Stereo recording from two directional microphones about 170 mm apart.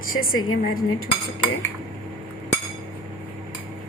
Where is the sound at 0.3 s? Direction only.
60° left (ahead or behind).